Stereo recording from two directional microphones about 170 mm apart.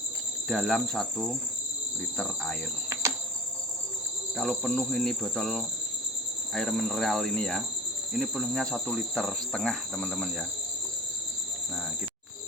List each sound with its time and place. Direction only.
0.4 s insect: centre (ahead or behind)
2.9 s cricket: 15° right (ahead or behind)
4.4 s insect: 5° left (ahead or behind)